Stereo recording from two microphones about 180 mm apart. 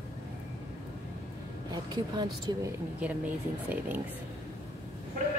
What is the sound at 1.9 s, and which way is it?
Speech, 25° right (ahead or behind).